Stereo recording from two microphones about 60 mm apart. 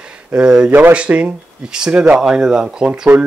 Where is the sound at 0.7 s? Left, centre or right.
Right.